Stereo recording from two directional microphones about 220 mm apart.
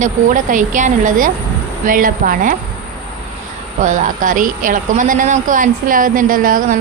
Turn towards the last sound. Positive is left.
turn(degrees=-40)  # may be behind; listen again after turning